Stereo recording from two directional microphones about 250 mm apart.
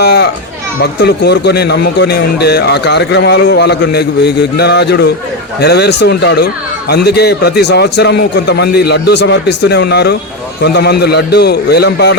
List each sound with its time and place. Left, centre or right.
0.0 s a child's voice: left